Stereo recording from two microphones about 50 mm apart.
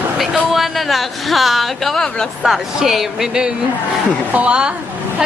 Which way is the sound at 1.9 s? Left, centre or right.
Centre.